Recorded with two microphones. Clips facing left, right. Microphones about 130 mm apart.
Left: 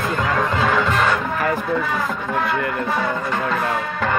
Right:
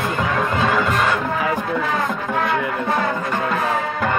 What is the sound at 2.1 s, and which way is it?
Music, centre (ahead or behind).